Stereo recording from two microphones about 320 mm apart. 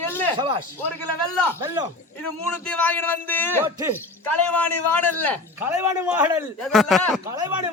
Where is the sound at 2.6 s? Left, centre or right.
Centre.